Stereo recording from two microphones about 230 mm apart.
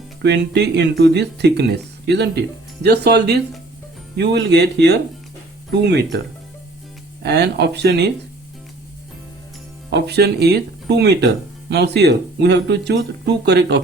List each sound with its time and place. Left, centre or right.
0.2 s speech: right
9.9 s speech: right